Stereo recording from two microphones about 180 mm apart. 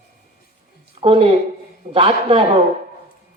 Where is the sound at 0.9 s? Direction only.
30° right (ahead or behind).